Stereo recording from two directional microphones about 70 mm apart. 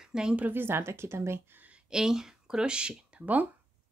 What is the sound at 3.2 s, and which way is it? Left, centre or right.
Speech, right.